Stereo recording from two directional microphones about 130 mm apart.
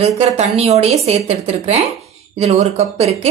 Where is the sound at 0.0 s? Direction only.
50° right (ahead or behind).